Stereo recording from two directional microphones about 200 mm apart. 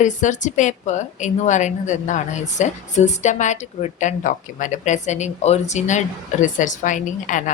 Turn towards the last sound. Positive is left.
turn(degrees=40)  # may be behind; listen again after turning